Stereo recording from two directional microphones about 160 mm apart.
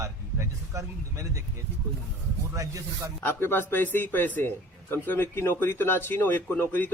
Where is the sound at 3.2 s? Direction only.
15° left (ahead or behind).